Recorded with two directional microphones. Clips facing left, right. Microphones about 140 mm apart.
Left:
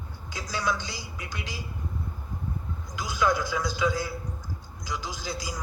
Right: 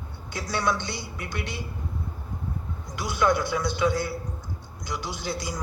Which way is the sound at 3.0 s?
60° right (ahead or behind).